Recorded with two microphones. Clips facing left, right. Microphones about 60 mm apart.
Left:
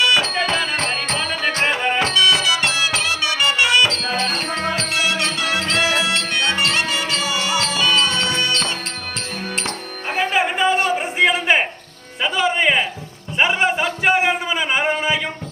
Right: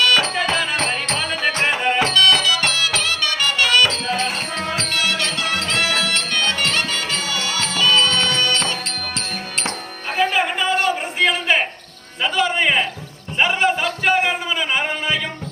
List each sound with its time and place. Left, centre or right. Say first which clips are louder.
0.0 s music: even; centre
0.3 s music: even; centre
2.1 s music: right 1 dB; centre
4.0 s music: even; centre
4.9 s music: left 1 dB; centre
10.2 s a sound: even; centre
12.2 s music: left 1 dB; centre
13.4 s a sound: even; centre